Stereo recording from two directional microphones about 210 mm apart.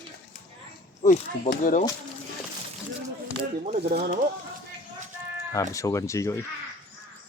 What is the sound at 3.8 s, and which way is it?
Speech, 50° right (ahead or behind).